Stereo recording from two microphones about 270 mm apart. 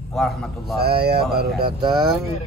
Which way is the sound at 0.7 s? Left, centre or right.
Right.